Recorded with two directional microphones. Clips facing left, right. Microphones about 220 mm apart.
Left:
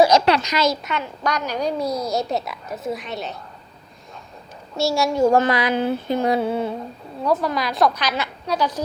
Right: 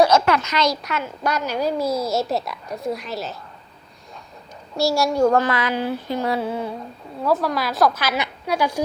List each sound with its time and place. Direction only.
0.4 s a woman's voice: 10° left (ahead or behind)
4.8 s a woman's voice: centre (ahead or behind)
5.4 s a sound: 15° left (ahead or behind)
7.3 s a woman's voice: 5° right (ahead or behind)